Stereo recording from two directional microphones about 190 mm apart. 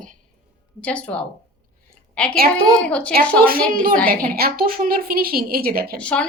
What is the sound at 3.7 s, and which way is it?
A woman's voice, 45° right (ahead or behind).